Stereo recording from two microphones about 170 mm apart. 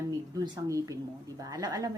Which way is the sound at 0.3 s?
20° right (ahead or behind).